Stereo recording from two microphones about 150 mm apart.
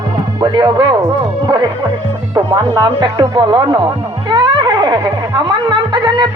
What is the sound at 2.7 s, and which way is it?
Speech, 30° right (ahead or behind).